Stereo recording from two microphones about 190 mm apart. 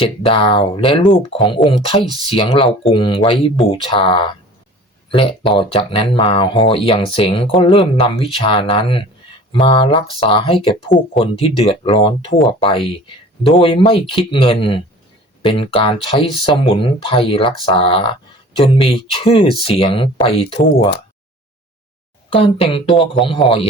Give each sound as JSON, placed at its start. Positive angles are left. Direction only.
{"t": 0.0, "sound": "speech", "side_deg": 30}
{"t": 22.3, "sound": "speech", "side_deg": 30}